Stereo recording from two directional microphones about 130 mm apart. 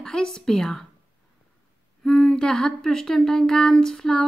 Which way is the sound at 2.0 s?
5° left (ahead or behind).